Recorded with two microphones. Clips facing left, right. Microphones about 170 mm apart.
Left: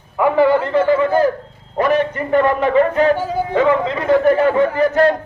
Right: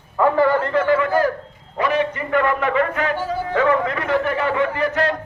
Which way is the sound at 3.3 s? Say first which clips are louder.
Left 3 dB; 15° left (ahead or behind).